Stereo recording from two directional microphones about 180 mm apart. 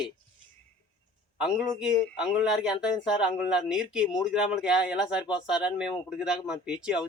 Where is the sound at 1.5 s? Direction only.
Centre (ahead or behind).